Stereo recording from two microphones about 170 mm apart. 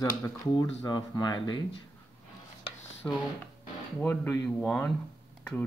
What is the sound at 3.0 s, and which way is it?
Speech, 15° left (ahead or behind).